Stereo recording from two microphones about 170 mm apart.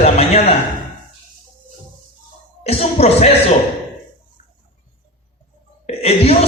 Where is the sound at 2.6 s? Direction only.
35° left (ahead or behind).